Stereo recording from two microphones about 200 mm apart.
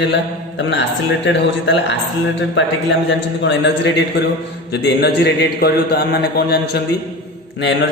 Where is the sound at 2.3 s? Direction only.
65° left (ahead or behind).